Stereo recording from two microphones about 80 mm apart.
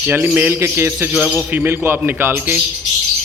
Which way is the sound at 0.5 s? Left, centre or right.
Right.